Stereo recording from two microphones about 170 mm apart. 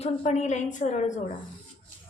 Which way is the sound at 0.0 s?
45° left (ahead or behind).